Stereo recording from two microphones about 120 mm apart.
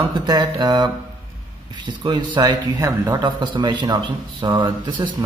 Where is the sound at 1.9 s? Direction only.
40° right (ahead or behind).